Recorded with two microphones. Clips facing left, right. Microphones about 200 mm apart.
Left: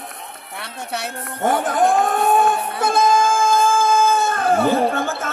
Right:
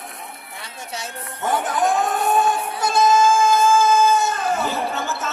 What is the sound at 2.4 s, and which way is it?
Music, 55° left (ahead or behind).